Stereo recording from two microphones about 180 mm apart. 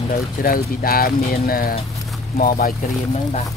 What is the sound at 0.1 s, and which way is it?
Speech, 55° left (ahead or behind).